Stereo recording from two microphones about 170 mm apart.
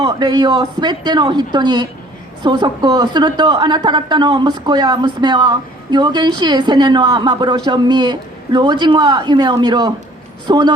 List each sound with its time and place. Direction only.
0.0 s a woman's voice: 20° right (ahead or behind)